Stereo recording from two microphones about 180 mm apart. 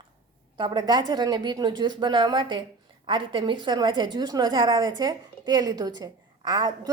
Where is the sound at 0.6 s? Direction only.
25° right (ahead or behind).